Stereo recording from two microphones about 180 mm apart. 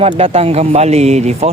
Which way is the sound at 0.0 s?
35° right (ahead or behind).